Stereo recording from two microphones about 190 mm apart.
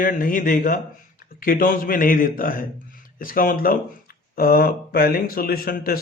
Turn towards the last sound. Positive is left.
turn(degrees=50)  # may be behind; listen again after turning